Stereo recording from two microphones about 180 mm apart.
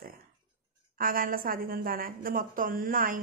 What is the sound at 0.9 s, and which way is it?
A woman's voice, 50° right (ahead or behind).